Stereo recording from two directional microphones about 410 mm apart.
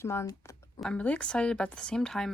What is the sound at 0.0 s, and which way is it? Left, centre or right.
Speech, centre.